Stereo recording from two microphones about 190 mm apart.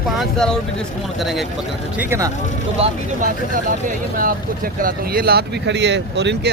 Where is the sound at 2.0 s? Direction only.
15° right (ahead or behind).